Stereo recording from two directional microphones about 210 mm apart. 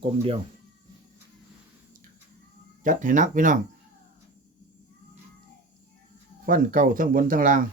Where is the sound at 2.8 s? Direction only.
40° right (ahead or behind).